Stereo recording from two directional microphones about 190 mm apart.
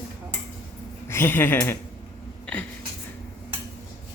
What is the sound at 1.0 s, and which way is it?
Speech, 15° left (ahead or behind).